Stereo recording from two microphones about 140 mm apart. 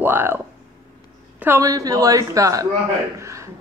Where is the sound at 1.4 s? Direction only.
20° right (ahead or behind).